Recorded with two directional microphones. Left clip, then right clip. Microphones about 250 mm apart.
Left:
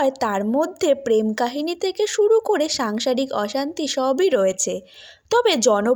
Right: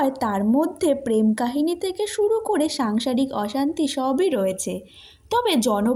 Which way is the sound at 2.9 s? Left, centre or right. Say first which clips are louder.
Left 2 dB; centre.